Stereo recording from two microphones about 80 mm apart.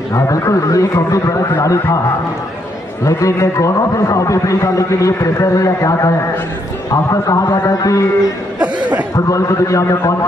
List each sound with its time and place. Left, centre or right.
0.1 s a man's voice: left
3.1 s a man's voice: left